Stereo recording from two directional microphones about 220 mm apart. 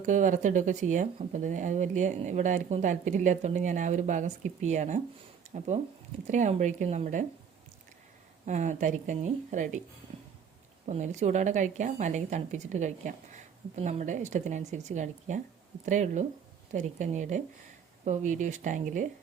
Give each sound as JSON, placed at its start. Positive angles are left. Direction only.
{"t": 0.0, "sound": "speech", "side_deg": -35}
{"t": 8.4, "sound": "speech", "side_deg": -35}
{"t": 10.8, "sound": "speech", "side_deg": -35}